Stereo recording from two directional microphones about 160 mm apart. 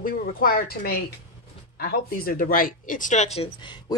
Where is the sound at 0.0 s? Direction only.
65° left (ahead or behind).